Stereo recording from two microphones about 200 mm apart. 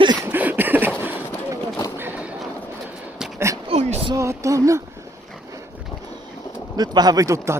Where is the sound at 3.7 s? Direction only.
30° right (ahead or behind).